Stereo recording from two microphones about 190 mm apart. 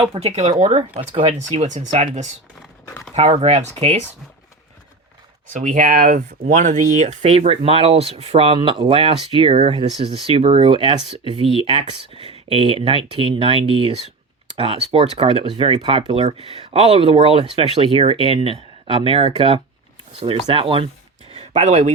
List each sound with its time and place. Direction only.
0.0 s speech: 30° right (ahead or behind)
5.5 s speech: 45° right (ahead or behind)